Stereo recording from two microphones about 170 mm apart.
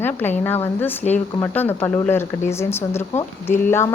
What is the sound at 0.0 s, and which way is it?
A woman's voice, 10° left (ahead or behind).